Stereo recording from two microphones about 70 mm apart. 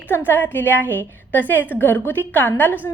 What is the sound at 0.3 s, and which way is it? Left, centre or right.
A woman's voice, left.